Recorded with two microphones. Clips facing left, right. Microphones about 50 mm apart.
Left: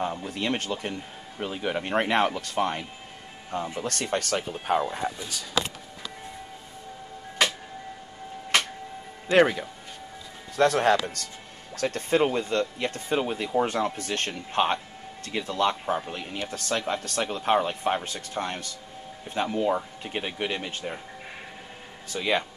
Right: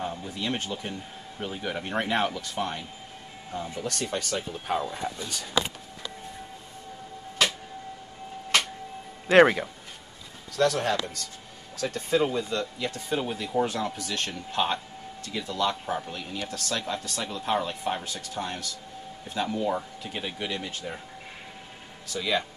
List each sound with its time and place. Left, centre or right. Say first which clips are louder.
0.0 s speech: left 3 dB; left
4.6 s speech: left 4 dB; left
5.4 s a sound: even; centre
9.3 s speech: right 3 dB; centre
10.5 s speech: left 3 dB; left
10.9 s speech: left 6 dB; left
16.3 s speech: left 3 dB; left
22.1 s speech: left 2 dB; left